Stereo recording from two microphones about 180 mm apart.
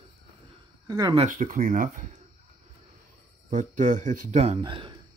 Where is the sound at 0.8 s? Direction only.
20° right (ahead or behind).